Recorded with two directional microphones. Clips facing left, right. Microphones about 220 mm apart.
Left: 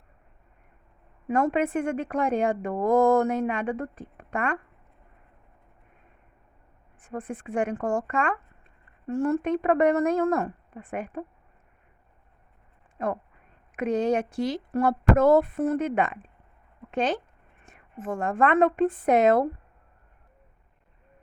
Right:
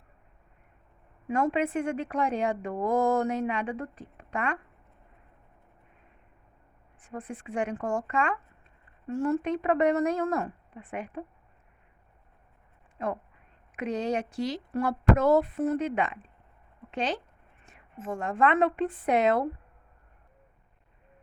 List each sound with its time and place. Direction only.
1.3 s a woman's voice: 50° left (ahead or behind)
7.0 s a woman's voice: 50° left (ahead or behind)
13.0 s a woman's voice: 50° left (ahead or behind)
16.9 s a woman's voice: 50° left (ahead or behind)